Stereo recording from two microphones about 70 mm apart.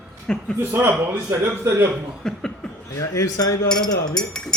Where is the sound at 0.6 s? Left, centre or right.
Right.